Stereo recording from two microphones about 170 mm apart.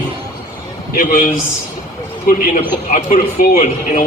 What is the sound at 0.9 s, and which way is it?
Speech, 55° left (ahead or behind).